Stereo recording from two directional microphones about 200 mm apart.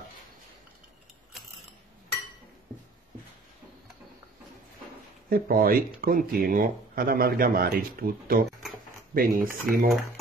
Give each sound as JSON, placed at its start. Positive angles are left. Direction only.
{"t": 5.3, "sound": "speech", "side_deg": -50}